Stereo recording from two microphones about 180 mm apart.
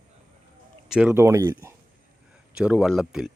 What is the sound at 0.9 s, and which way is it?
Speech, 10° right (ahead or behind).